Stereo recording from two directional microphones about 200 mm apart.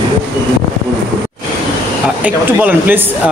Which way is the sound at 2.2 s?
10° right (ahead or behind).